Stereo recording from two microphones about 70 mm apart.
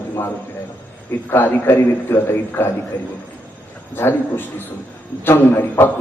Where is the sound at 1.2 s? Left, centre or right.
Left.